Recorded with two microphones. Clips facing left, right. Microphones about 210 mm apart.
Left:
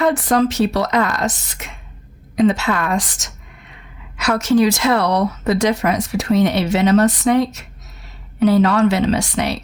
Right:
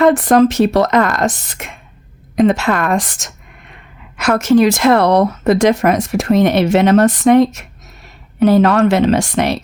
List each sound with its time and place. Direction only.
0.0 s speech: 50° right (ahead or behind)